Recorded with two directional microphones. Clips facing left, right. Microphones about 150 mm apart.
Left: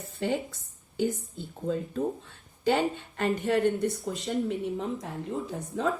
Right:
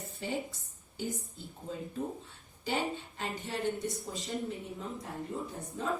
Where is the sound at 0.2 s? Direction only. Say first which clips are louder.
Left 8 dB; 65° left (ahead or behind).